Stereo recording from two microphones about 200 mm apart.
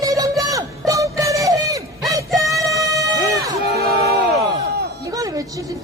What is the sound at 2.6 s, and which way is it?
Music, 15° right (ahead or behind).